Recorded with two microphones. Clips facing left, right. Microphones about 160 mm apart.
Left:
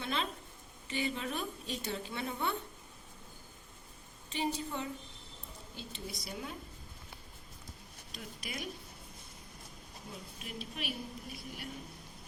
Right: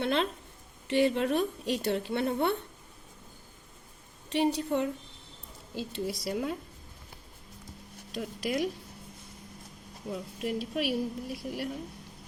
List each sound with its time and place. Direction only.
0.0 s a woman's voice: 70° right (ahead or behind)
4.3 s a woman's voice: 70° right (ahead or behind)
5.7 s a woman's voice: 90° right
8.1 s speech: 90° right
10.1 s a woman's voice: 80° right